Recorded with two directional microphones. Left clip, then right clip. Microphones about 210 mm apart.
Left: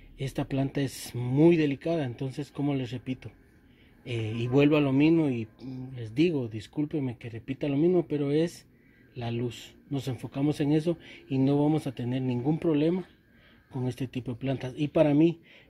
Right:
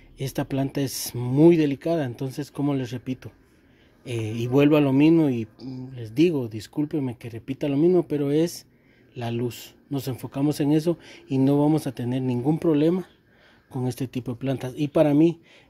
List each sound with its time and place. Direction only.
0.2 s speech: 15° right (ahead or behind)